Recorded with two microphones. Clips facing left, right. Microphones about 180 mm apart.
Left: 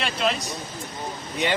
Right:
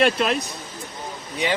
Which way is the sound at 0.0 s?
55° right (ahead or behind).